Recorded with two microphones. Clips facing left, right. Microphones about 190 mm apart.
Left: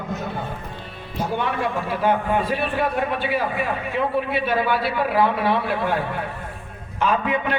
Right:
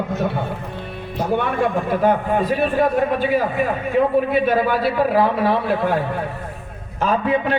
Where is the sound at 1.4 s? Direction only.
50° right (ahead or behind).